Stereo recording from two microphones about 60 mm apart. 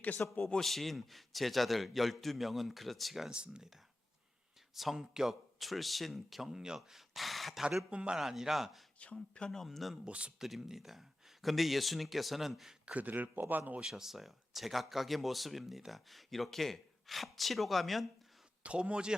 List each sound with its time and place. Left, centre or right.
0.2 s a man's voice: left
0.6 s speech: centre
3.2 s speech: centre
4.7 s speech: centre
7.6 s speech: centre
8.2 s speech: centre
9.0 s speech: centre
9.6 s speech: centre
10.1 s a man's voice: centre
10.4 s speech: centre
12.8 s a man's voice: right
13.8 s speech: centre
18.6 s speech: centre